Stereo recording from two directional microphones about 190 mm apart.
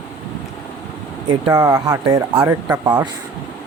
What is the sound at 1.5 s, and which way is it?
Speech, 15° right (ahead or behind).